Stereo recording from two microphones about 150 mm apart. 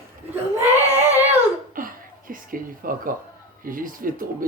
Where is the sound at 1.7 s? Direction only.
65° right (ahead or behind).